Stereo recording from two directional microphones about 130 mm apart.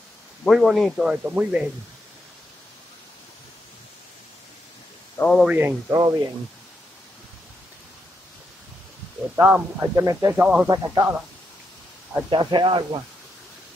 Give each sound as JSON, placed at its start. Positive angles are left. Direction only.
{"t": 0.5, "sound": "speech", "side_deg": 0}
{"t": 1.1, "sound": "speech", "side_deg": -10}
{"t": 5.2, "sound": "speech", "side_deg": 20}
{"t": 5.5, "sound": "speech", "side_deg": -15}
{"t": 5.9, "sound": "speech", "side_deg": -30}
{"t": 9.3, "sound": "speech", "side_deg": -10}
{"t": 9.8, "sound": "speech", "side_deg": -25}
{"t": 10.4, "sound": "speech", "side_deg": -10}
{"t": 10.7, "sound": "speech", "side_deg": -30}
{"t": 12.3, "sound": "speech", "side_deg": -35}